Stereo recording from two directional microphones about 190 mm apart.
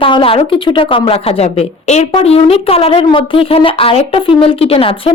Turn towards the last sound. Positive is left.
turn(degrees=30)  # may be behind; listen again after turning